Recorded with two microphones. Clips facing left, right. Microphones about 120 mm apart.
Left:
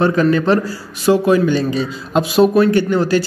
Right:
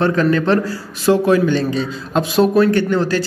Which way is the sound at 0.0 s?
10° left (ahead or behind).